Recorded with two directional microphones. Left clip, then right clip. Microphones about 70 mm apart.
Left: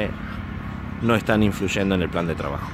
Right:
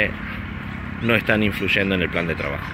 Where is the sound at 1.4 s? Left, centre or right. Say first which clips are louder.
Right 3 dB; left.